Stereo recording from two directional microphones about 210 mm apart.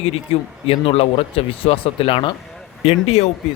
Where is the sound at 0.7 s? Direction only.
25° left (ahead or behind).